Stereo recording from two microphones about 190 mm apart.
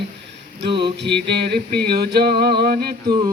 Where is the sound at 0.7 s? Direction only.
25° right (ahead or behind).